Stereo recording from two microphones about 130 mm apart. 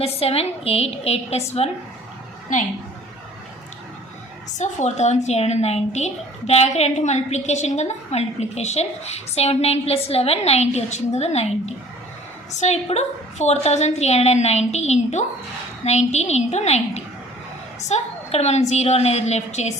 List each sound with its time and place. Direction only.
0.0 s a woman's voice: 50° left (ahead or behind)
4.5 s a woman's voice: 65° left (ahead or behind)